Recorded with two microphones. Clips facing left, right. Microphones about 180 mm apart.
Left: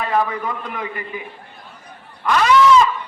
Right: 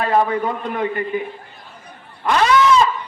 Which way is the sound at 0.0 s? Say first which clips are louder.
Right 3 dB; 30° right (ahead or behind).